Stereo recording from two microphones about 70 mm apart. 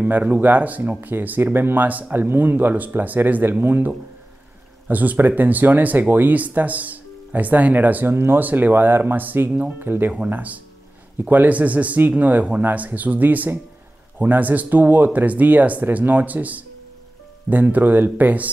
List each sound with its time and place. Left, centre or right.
0.0 s speech: right
10.1 s speech: right